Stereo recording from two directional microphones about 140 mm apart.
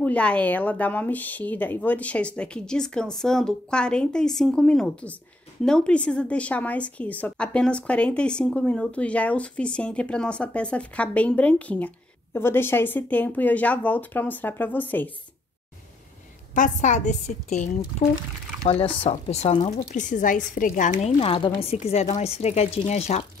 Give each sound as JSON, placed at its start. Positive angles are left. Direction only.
{"t": 0.0, "sound": "a woman's voice", "side_deg": 10}
{"t": 16.5, "sound": "speech", "side_deg": 65}
{"t": 19.0, "sound": "speech", "side_deg": 50}
{"t": 19.9, "sound": "a woman's voice", "side_deg": 65}
{"t": 21.2, "sound": "speech", "side_deg": 40}